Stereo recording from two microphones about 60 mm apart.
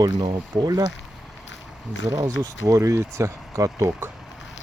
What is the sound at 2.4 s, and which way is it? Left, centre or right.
Speech, right.